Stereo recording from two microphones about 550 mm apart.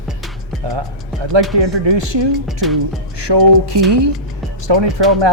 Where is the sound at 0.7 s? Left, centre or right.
Right.